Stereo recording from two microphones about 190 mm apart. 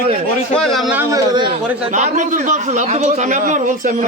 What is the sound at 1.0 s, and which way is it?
Speech, 20° right (ahead or behind).